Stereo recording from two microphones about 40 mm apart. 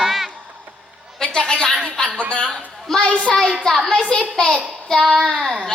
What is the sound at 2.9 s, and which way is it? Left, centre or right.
A child's voice, centre.